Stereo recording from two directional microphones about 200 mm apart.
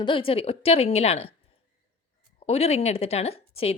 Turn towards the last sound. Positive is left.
turn(degrees=30)  # may be behind; listen again after turning